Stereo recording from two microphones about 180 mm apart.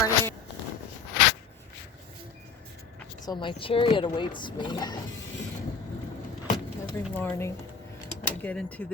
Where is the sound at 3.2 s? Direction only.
25° left (ahead or behind).